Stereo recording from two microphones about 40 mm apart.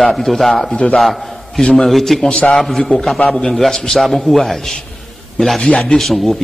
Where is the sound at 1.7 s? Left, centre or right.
Centre.